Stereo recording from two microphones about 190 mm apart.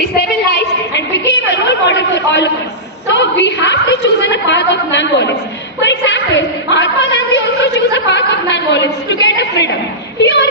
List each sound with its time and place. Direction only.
0.5 s chatter: 60° left (ahead or behind)
3.1 s a woman's voice: 70° left (ahead or behind)